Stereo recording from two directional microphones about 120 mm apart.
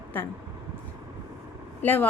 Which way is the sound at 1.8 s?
15° left (ahead or behind).